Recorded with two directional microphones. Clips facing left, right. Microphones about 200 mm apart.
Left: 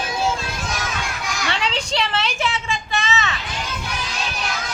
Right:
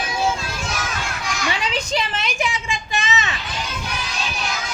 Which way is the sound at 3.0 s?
15° right (ahead or behind).